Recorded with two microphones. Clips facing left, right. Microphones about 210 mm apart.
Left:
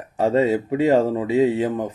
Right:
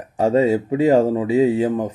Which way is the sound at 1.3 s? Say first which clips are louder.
Right 1 dB; 35° right (ahead or behind).